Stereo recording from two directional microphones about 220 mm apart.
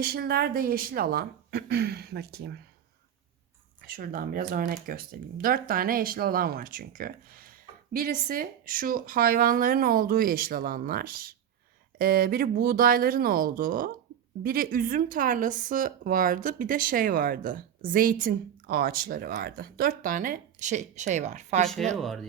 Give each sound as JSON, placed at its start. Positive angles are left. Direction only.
{"t": 0.0, "sound": "speech", "side_deg": -45}
{"t": 3.8, "sound": "speech", "side_deg": -40}
{"t": 21.9, "sound": "speech", "side_deg": 0}